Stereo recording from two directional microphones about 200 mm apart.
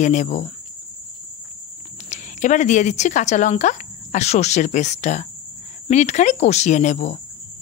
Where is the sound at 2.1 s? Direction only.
35° left (ahead or behind).